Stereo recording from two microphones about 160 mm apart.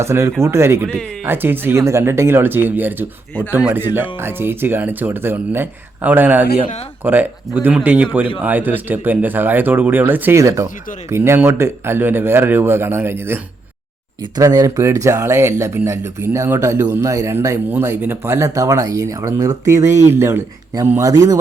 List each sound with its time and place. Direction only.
0.0 s speech: 15° right (ahead or behind)
14.2 s speech: 25° right (ahead or behind)